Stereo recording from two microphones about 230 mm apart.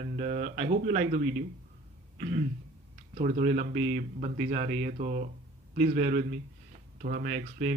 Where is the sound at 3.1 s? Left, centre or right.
Right.